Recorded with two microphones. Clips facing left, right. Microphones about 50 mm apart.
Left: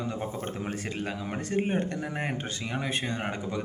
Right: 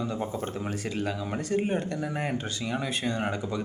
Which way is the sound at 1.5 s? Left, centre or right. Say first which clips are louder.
Even; left.